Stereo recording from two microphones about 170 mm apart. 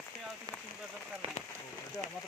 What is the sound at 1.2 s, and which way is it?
Rain on surface, 35° right (ahead or behind).